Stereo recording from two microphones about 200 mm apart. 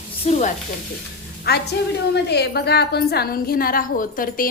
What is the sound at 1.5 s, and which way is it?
A woman's voice, 50° left (ahead or behind).